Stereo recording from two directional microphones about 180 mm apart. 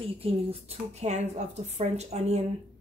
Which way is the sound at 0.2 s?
35° right (ahead or behind).